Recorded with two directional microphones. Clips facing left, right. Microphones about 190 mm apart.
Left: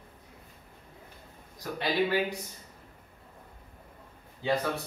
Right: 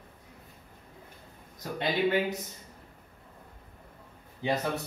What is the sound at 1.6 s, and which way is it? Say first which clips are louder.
Speech: even; 25° right (ahead or behind).